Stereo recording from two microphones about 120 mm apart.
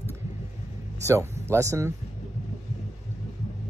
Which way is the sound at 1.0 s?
25° right (ahead or behind).